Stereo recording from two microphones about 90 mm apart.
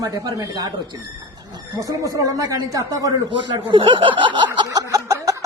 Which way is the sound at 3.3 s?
65° right (ahead or behind).